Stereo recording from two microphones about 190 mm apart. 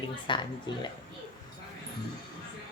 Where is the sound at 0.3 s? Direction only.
25° left (ahead or behind).